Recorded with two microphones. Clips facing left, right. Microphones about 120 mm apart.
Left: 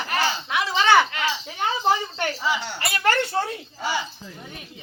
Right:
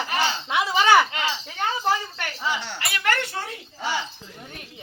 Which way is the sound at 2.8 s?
35° left (ahead or behind).